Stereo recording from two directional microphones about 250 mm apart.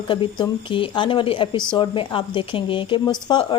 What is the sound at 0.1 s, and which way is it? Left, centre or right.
A woman's voice, centre.